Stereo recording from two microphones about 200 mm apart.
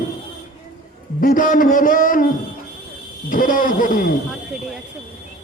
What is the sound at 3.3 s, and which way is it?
Speech, 45° left (ahead or behind).